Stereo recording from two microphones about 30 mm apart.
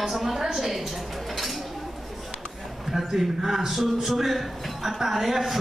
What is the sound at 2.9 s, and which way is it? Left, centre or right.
A man's voice, centre.